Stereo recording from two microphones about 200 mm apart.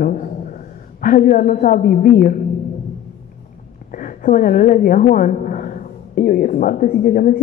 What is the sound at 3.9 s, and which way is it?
A woman's voice, 40° left (ahead or behind).